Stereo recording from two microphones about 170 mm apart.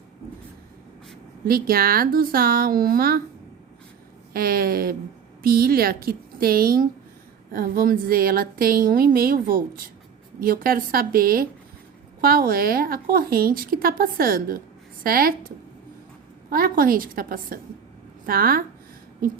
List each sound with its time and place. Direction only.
1.5 s a woman's voice: 60° right (ahead or behind)
4.3 s a woman's voice: 60° right (ahead or behind)